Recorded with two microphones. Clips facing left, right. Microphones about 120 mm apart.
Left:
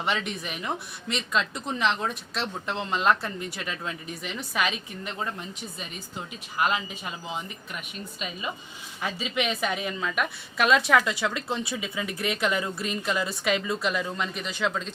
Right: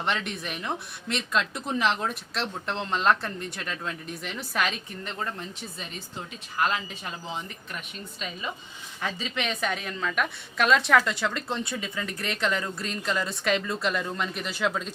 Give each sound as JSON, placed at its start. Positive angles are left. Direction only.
{"t": 0.0, "sound": "a woman's voice", "side_deg": 5}
{"t": 6.6, "sound": "a woman's voice", "side_deg": 10}